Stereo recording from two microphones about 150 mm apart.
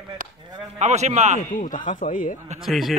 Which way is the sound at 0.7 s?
50° right (ahead or behind).